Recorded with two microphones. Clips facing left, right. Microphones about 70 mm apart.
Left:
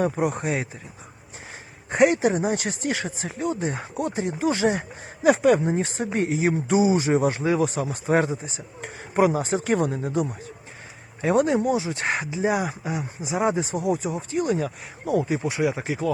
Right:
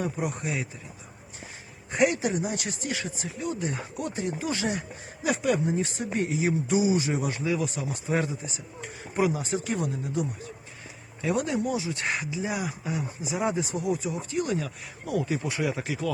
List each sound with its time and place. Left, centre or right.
0.0 s speech: left
1.9 s speech: left
3.5 s speech: left
11.2 s speech: left
12.8 s speech: left; by 15.8 s centre
15.8 s speech: left